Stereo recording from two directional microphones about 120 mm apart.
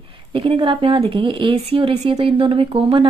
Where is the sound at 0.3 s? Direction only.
50° right (ahead or behind).